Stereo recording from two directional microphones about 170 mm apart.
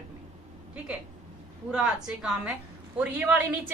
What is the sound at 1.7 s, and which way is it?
A woman's voice, 5° right (ahead or behind).